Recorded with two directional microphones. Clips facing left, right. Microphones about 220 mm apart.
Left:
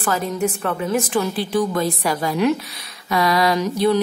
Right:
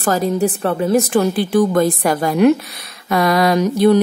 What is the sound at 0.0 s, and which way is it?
Speech, 40° right (ahead or behind).